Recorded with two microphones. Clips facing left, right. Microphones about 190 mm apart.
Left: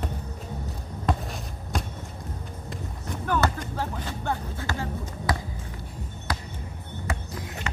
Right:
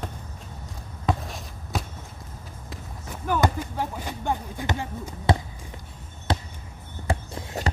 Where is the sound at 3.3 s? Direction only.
10° right (ahead or behind).